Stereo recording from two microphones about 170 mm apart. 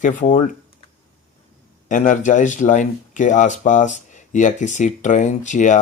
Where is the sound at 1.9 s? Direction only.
50° left (ahead or behind).